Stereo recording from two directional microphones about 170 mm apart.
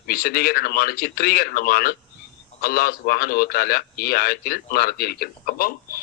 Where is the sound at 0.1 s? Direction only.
60° left (ahead or behind).